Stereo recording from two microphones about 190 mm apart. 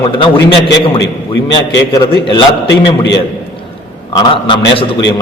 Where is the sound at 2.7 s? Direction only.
65° left (ahead or behind).